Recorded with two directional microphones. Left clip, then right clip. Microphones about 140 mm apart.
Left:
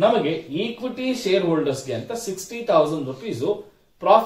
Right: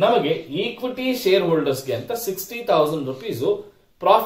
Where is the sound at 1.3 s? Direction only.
30° right (ahead or behind).